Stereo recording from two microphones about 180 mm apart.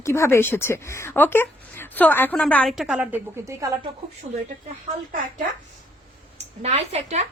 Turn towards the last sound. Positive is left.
turn(degrees=-35)  # may be behind; listen again after turning